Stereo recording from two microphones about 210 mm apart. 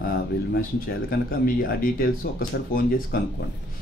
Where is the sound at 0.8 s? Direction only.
45° left (ahead or behind).